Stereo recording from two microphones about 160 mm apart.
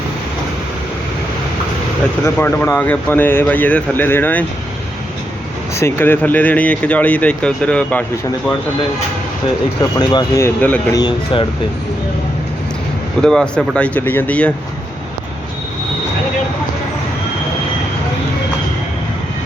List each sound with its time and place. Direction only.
2.2 s speech: 15° left (ahead or behind)
5.7 s speech: 15° left (ahead or behind)
10.0 s speech: 25° left (ahead or behind); by 10.9 s 10° left (ahead or behind)
10.9 s speech: 30° left (ahead or behind)
13.2 s speech: 5° left (ahead or behind)